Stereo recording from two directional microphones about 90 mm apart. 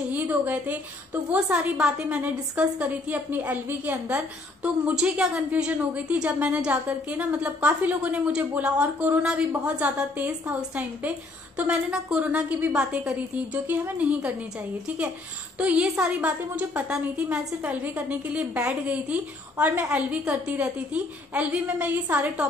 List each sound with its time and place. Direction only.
0.1 s a woman's voice: 20° right (ahead or behind)
15.6 s a woman's voice: 15° right (ahead or behind)